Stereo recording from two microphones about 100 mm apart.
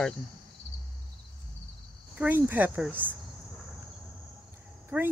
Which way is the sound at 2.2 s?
15° right (ahead or behind).